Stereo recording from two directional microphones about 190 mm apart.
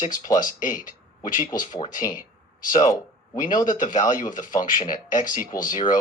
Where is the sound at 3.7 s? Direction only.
40° left (ahead or behind).